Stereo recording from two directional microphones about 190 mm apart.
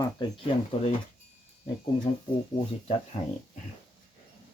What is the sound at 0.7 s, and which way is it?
Speech, 30° left (ahead or behind).